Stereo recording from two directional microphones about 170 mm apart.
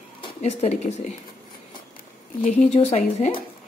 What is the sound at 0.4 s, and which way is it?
Speech, 40° left (ahead or behind).